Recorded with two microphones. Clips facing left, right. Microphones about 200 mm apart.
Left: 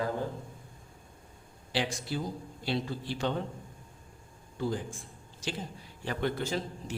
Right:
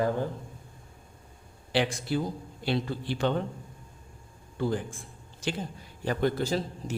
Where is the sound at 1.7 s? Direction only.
60° right (ahead or behind).